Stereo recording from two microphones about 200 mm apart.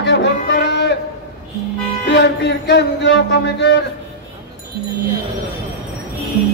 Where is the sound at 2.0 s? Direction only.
60° left (ahead or behind).